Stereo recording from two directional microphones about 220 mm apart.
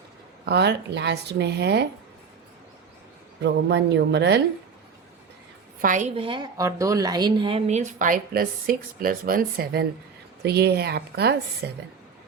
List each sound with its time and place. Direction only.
0.4 s speech: 50° right (ahead or behind)
3.4 s speech: 50° right (ahead or behind)
5.8 s a woman's voice: 35° right (ahead or behind)